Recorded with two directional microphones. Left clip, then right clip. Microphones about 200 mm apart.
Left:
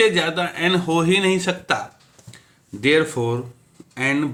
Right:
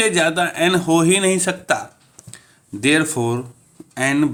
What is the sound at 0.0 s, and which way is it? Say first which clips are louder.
Speech: right 1 dB; 40° right (ahead or behind).